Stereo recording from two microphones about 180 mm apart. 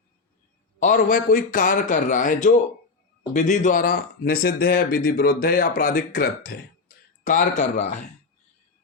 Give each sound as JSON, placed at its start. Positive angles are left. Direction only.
{"t": 0.8, "sound": "speech", "side_deg": 45}